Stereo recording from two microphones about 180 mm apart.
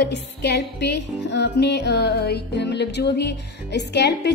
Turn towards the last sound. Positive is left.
turn(degrees=70)  # may be behind; listen again after turning